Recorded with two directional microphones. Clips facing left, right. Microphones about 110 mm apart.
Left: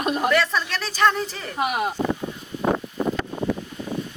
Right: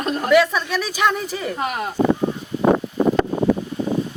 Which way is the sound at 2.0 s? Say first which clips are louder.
Right 7 dB; 65° right (ahead or behind).